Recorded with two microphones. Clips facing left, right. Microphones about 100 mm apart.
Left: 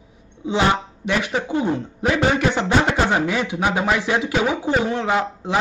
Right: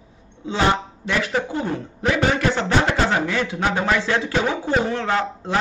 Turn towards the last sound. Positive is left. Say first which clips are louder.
# left 1 dB
turn(degrees=15)  # may be behind; listen again after turning